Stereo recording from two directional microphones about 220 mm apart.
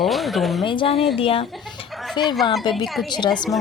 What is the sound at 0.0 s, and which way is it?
Speech, centre (ahead or behind).